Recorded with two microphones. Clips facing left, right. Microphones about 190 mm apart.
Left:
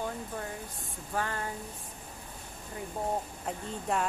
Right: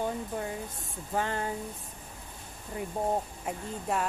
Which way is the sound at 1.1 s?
20° right (ahead or behind).